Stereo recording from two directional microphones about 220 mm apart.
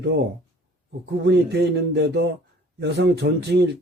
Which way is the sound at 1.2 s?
50° right (ahead or behind).